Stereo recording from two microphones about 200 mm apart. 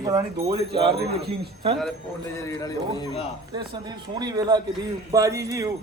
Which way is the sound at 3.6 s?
20° right (ahead or behind).